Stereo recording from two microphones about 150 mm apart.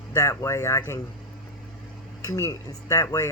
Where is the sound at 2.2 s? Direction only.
20° left (ahead or behind).